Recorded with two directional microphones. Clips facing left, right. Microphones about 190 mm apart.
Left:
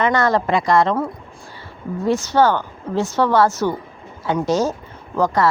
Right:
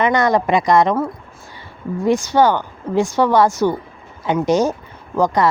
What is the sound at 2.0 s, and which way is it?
Speech, 15° right (ahead or behind).